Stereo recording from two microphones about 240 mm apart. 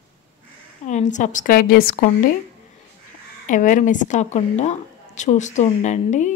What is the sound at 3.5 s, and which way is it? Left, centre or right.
A woman's voice, left.